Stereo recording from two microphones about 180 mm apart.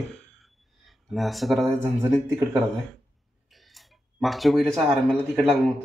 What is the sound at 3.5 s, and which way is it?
Tick-tock, centre (ahead or behind).